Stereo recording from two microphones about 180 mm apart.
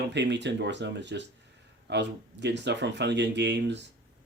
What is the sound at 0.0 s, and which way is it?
Speech, 70° right (ahead or behind).